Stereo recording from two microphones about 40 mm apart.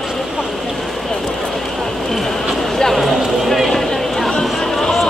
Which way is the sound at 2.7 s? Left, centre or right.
Centre.